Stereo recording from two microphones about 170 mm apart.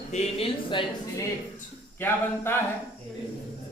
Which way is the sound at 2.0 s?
15° left (ahead or behind).